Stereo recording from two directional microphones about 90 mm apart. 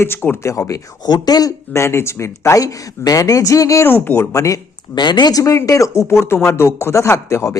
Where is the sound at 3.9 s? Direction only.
25° left (ahead or behind).